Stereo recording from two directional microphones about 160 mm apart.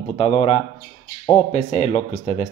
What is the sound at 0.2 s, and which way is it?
Speech, 40° left (ahead or behind).